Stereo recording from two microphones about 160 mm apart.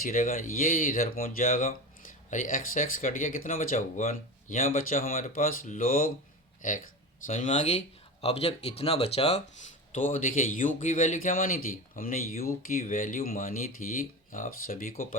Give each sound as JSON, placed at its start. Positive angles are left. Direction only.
{"t": 0.0, "sound": "a man's voice", "side_deg": 60}